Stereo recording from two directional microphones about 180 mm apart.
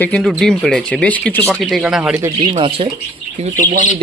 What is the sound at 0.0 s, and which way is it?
Speech, 5° left (ahead or behind).